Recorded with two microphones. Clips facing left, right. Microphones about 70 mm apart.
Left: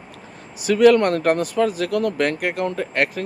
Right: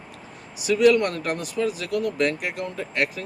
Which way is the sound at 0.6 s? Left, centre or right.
Left.